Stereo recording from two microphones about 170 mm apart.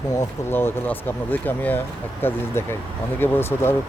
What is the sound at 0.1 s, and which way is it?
Speech, 15° left (ahead or behind).